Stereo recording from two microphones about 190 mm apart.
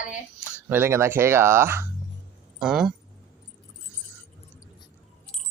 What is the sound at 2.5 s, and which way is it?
Speech, centre (ahead or behind).